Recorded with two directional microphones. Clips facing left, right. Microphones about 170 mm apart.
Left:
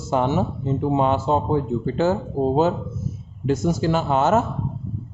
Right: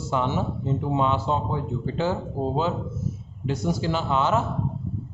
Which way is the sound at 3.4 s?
45° left (ahead or behind).